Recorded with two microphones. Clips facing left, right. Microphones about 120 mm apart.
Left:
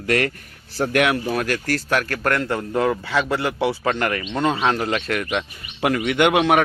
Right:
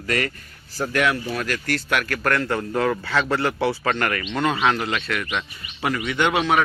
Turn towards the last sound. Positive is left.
turn(degrees=55)  # may be behind; listen again after turning